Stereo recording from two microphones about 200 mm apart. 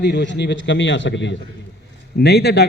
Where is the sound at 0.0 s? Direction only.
60° left (ahead or behind).